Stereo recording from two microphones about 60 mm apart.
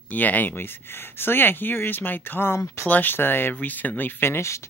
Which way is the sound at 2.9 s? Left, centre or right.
Left.